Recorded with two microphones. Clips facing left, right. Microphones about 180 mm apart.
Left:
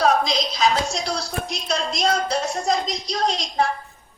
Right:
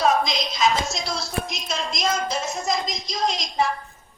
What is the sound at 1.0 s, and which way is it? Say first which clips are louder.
Speech: left 1 dB; 35° left (ahead or behind).